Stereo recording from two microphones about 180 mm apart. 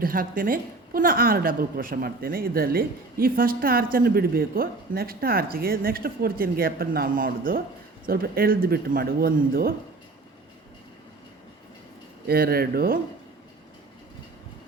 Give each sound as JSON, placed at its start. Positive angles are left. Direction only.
{"t": 0.0, "sound": "a woman's voice", "side_deg": -50}
{"t": 12.3, "sound": "a woman's voice", "side_deg": -60}